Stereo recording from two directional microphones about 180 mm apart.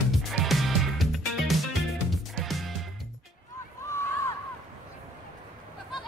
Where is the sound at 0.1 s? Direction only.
Centre (ahead or behind).